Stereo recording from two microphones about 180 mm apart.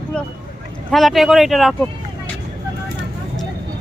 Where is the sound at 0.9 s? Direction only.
Centre (ahead or behind).